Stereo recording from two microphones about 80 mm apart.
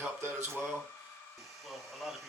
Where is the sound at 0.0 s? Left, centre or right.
Right.